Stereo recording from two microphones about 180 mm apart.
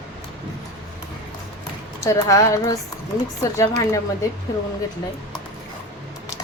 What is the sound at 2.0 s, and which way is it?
A woman's voice, 20° left (ahead or behind).